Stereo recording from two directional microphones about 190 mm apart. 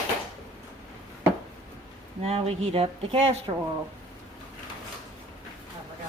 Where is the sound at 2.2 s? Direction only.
30° right (ahead or behind).